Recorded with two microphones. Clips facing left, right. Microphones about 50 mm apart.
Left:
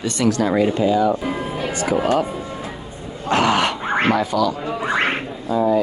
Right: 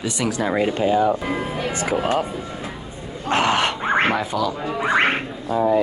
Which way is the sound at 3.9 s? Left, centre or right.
Centre.